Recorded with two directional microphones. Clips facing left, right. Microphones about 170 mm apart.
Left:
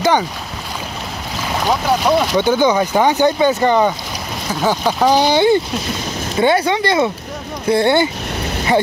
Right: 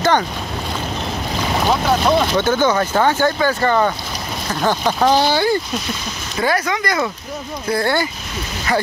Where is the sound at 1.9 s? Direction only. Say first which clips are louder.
Left 2 dB; 10° left (ahead or behind).